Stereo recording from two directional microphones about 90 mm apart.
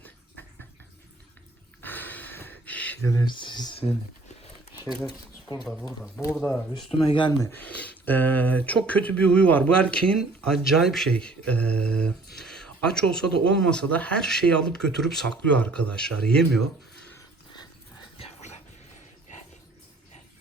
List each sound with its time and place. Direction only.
1.8 s a sound: 20° left (ahead or behind)
3.0 s speech: 35° left (ahead or behind)
3.2 s speech: 60° left (ahead or behind)
6.3 s speech: 5° left (ahead or behind)
6.9 s speech: 65° left (ahead or behind)
7.5 s speech: 20° left (ahead or behind)
10.2 s speech: centre (ahead or behind)